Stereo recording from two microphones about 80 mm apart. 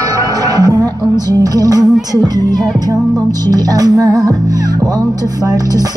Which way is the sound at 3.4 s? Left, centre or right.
Right.